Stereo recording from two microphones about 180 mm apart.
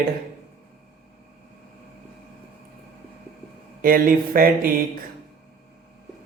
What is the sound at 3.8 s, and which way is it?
Speech, 50° right (ahead or behind).